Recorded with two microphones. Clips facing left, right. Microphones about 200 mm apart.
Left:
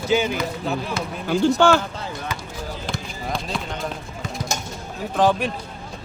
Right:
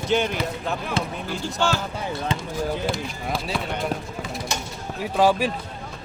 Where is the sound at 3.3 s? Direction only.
5° right (ahead or behind).